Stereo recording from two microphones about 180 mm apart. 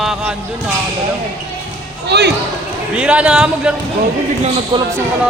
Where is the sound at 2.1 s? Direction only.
65° right (ahead or behind).